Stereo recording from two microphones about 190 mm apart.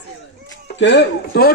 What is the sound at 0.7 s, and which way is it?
Speech, 70° left (ahead or behind).